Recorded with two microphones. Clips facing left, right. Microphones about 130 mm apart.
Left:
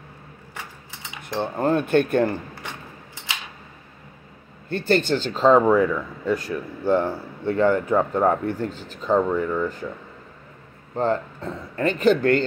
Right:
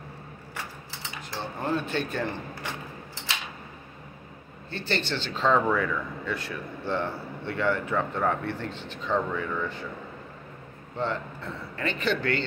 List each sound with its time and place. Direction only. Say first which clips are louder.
1.3 s speech: left 8 dB; 55° left (ahead or behind)
4.6 s a man's voice: left 10 dB; 50° left (ahead or behind)
11.0 s speech: left 7 dB; 40° left (ahead or behind)